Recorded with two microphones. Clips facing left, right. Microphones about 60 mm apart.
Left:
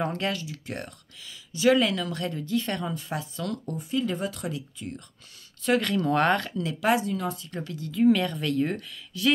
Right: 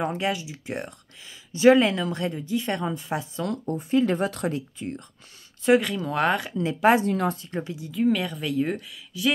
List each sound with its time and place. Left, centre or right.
0.0 s speech: centre; by 4.6 s right
4.6 s speech: right
5.8 s speech: centre
6.5 s speech: right
7.1 s speech: right
7.4 s speech: right
7.9 s speech: centre